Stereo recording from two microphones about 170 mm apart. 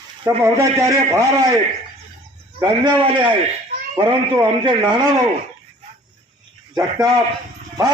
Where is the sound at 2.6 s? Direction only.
25° right (ahead or behind).